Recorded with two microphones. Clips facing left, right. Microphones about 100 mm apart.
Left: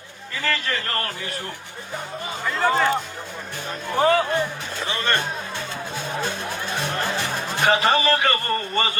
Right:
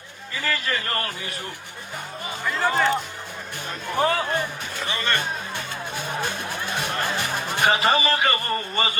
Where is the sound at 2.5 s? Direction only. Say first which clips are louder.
Left 2 dB; centre (ahead or behind).